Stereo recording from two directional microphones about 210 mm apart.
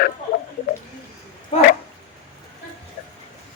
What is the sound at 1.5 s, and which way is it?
Bow-wow, 30° left (ahead or behind).